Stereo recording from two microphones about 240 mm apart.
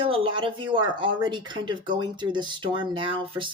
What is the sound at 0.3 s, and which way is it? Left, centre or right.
Speech, right.